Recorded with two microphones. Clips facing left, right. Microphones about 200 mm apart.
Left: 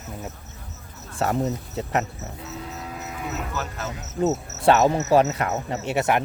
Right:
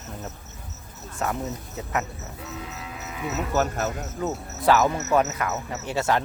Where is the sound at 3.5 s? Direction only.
45° right (ahead or behind).